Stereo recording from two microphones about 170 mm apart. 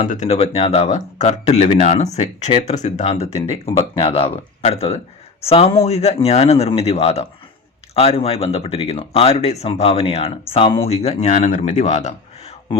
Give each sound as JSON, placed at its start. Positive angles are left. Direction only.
{"t": 0.1, "sound": "speech", "side_deg": 40}